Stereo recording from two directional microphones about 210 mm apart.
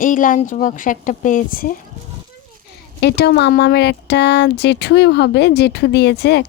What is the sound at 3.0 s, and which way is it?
Speech, 50° left (ahead or behind).